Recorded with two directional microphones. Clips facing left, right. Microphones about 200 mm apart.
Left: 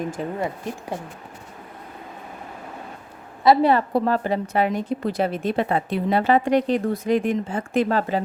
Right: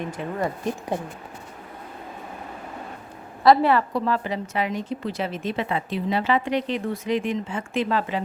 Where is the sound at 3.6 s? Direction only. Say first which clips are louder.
Left 3 dB; 40° left (ahead or behind).